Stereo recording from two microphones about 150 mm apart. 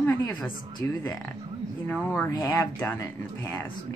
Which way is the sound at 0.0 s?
25° left (ahead or behind).